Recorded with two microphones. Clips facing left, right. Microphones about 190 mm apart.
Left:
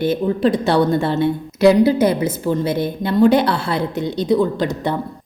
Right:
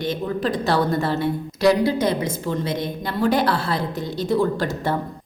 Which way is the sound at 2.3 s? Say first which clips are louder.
Left 5 dB; 5° left (ahead or behind).